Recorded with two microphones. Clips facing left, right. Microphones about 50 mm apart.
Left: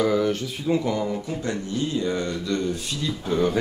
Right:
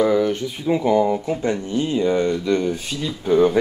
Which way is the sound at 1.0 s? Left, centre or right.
Right.